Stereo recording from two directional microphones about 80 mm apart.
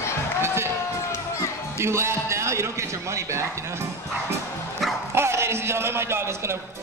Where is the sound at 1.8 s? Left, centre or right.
Right.